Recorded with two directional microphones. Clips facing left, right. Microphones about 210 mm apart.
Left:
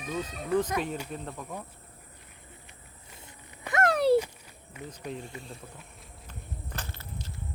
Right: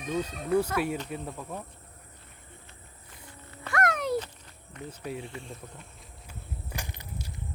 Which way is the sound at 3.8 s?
30° left (ahead or behind).